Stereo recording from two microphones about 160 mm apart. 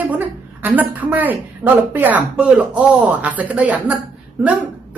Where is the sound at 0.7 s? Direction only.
10° right (ahead or behind).